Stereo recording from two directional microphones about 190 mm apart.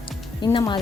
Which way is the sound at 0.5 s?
25° left (ahead or behind).